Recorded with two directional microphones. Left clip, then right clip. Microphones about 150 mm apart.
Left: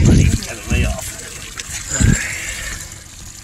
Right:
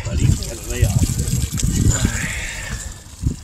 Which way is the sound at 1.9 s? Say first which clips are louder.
Left 4 dB; 15° left (ahead or behind).